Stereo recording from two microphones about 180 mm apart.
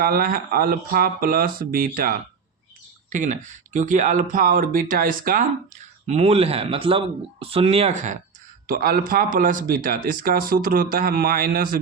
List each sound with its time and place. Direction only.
0.0 s speech: 55° right (ahead or behind)
8.6 s speech: 55° right (ahead or behind)